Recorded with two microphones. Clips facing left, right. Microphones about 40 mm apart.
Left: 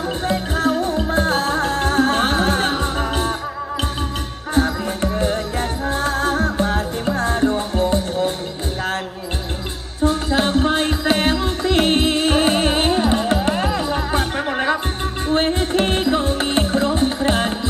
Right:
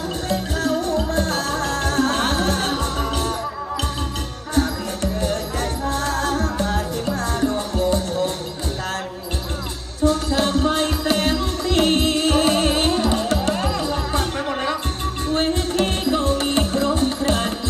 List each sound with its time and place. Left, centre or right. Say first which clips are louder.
0.3 s music: left 3 dB; left
5.1 s music: left 2 dB; left
10.0 s music: left 1 dB; left